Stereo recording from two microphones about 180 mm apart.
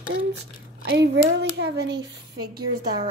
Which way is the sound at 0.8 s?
70° right (ahead or behind).